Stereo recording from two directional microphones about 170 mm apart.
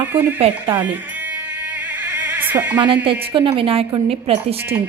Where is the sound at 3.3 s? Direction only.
30° right (ahead or behind).